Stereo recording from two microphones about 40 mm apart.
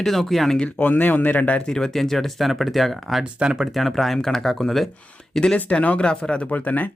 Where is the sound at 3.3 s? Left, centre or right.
Right.